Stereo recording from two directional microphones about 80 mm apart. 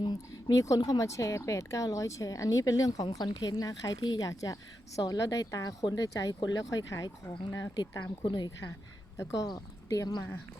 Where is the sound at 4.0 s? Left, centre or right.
Left.